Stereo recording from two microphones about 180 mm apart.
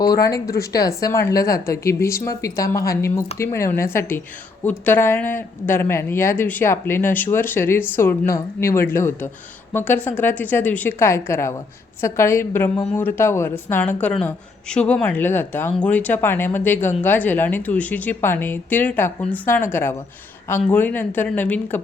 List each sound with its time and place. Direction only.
0.3 s speech: 20° left (ahead or behind)